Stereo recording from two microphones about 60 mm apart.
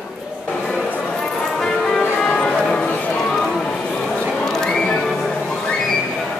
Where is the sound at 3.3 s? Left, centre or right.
Centre.